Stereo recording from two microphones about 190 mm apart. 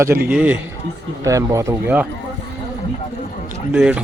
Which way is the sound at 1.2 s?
15° right (ahead or behind).